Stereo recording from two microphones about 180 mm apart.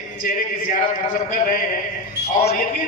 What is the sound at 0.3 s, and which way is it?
A man's voice, 50° left (ahead or behind).